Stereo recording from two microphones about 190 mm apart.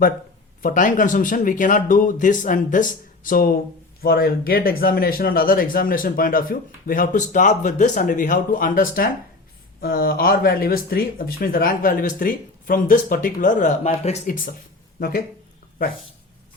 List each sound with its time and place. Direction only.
0.6 s speech: 45° left (ahead or behind)
14.9 s speech: 50° left (ahead or behind)